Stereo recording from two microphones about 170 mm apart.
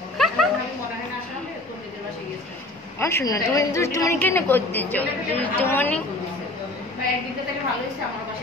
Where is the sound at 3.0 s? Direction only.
15° left (ahead or behind).